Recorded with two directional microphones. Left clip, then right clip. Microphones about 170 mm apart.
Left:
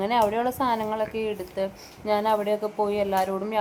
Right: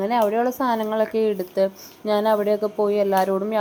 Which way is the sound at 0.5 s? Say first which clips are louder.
Right 4 dB; 35° right (ahead or behind).